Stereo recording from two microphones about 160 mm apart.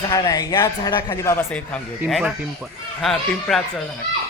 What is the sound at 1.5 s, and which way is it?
Speech, 5° left (ahead or behind).